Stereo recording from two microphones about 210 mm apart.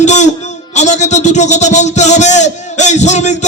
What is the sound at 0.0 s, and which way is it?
A man's voice, 35° left (ahead or behind).